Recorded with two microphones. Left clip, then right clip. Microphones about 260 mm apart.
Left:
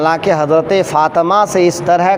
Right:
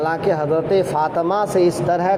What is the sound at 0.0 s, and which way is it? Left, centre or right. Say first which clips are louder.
Speech: left 7 dB; left.